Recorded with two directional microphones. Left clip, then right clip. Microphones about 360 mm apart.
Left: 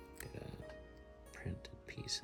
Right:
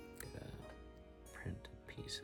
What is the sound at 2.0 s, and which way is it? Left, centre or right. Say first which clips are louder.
Speech: left 5 dB; centre.